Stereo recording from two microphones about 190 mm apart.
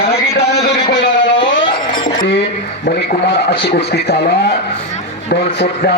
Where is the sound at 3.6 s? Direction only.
65° left (ahead or behind).